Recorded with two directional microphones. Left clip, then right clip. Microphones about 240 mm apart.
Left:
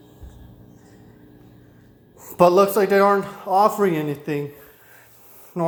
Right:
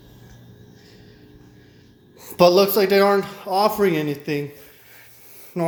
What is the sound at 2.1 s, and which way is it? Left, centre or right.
A man's voice, centre.